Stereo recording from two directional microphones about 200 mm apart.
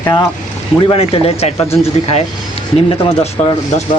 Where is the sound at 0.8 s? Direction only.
30° left (ahead or behind).